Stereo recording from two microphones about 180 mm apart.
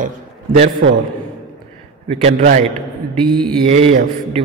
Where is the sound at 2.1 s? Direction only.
45° right (ahead or behind).